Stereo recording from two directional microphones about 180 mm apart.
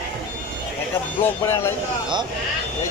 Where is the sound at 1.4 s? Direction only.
15° left (ahead or behind).